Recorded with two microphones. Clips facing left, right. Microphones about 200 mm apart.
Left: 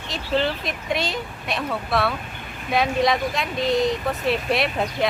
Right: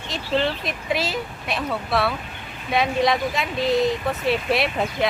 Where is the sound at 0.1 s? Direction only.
Centre (ahead or behind).